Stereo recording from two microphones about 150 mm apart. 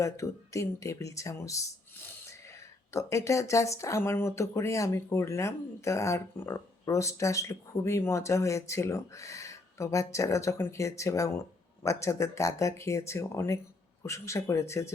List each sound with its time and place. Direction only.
0.0 s speech: 20° left (ahead or behind)
2.9 s speech: 20° left (ahead or behind)